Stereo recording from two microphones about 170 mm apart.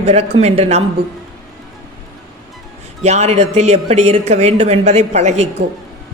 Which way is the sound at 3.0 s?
40° right (ahead or behind).